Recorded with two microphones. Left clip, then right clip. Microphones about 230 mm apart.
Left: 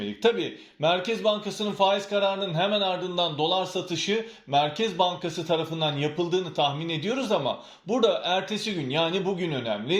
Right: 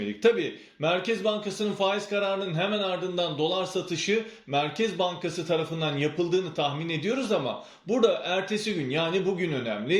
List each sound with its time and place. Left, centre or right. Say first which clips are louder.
0.2 s speech: right 1 dB; centre